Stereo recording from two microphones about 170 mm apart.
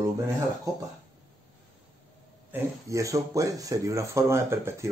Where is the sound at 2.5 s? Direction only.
20° right (ahead or behind).